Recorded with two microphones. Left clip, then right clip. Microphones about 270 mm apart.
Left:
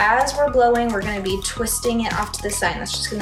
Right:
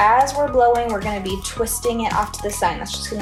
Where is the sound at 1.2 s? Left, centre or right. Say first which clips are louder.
Even; centre.